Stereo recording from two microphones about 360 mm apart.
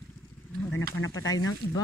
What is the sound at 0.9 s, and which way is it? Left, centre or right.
Speech, left.